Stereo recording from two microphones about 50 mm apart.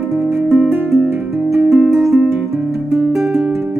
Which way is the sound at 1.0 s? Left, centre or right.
Right.